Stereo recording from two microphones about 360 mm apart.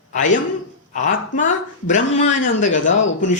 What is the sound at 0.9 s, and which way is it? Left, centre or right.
Speech, left.